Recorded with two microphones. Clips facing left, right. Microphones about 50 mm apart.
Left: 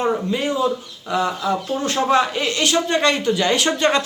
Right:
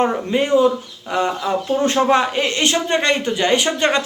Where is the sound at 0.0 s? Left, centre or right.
Right.